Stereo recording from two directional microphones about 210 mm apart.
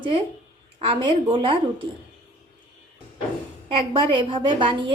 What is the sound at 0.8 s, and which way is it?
A woman's voice, 25° right (ahead or behind).